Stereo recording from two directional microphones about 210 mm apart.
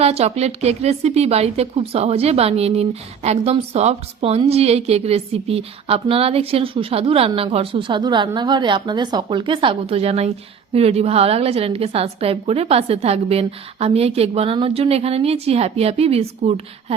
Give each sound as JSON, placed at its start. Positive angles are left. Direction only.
{"t": 0.0, "sound": "speech", "side_deg": -30}